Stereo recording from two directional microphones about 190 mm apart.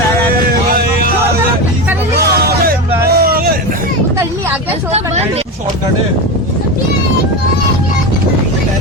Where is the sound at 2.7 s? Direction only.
55° right (ahead or behind).